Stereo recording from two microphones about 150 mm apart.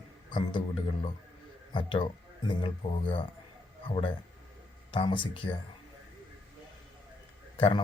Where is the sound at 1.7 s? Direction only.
35° left (ahead or behind).